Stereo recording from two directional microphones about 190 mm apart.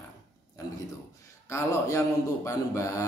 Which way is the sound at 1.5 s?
15° left (ahead or behind).